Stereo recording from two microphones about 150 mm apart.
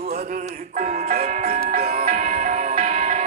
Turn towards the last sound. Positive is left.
turn(degrees=-50)  # may be behind; listen again after turning